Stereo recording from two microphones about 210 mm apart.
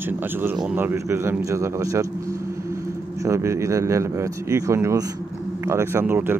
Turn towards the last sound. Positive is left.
turn(degrees=-10)  # may be behind; listen again after turning